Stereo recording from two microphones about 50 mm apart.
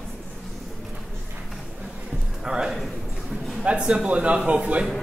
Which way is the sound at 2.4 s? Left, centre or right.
Centre.